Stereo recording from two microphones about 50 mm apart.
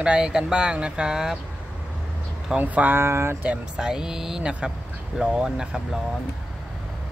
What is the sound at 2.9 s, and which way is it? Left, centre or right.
Speech, right.